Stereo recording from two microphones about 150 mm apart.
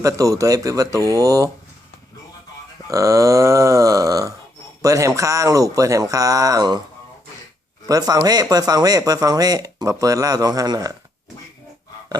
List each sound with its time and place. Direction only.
0.0 s speech: 20° right (ahead or behind)
2.8 s speech: 20° right (ahead or behind)
7.9 s speech: 25° right (ahead or behind)